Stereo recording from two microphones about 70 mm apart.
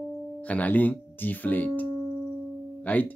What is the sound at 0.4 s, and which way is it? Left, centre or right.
Speech, left.